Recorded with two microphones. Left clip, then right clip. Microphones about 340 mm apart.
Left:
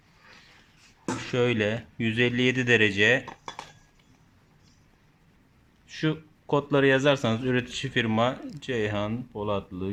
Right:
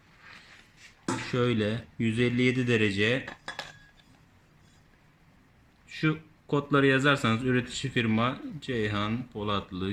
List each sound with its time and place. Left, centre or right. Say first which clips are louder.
1.3 s speech: left 4 dB; left
5.9 s speech: left 1 dB; centre